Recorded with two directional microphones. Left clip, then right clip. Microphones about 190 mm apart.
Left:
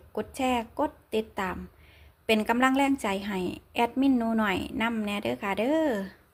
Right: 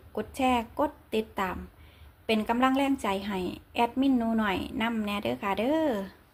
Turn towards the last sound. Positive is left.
turn(degrees=20)  # may be behind; listen again after turning